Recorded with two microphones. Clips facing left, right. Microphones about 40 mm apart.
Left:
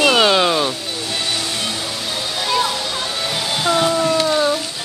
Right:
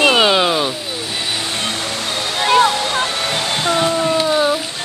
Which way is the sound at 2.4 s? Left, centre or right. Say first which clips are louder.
Right 7 dB; right.